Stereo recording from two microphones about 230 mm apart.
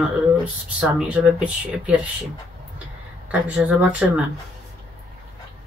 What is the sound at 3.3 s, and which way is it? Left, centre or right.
Speech, centre.